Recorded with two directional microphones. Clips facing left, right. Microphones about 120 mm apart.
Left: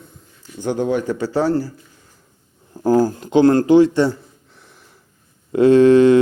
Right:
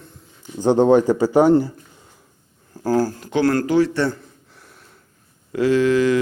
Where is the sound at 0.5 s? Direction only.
25° right (ahead or behind).